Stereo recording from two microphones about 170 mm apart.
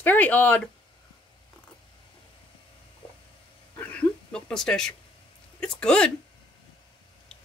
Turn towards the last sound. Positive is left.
turn(degrees=5)  # may be behind; listen again after turning